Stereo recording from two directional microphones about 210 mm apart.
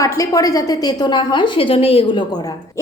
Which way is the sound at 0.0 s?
15° left (ahead or behind).